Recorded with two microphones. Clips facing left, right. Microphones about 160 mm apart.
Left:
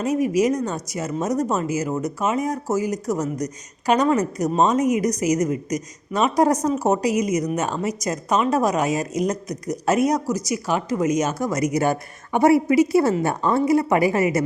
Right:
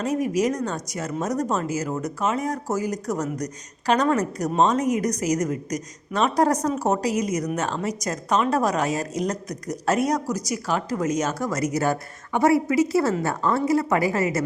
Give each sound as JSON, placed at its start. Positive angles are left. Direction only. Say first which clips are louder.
{"t": 0.0, "sound": "a woman's voice", "louder": "left 3 dB", "side_deg": 10}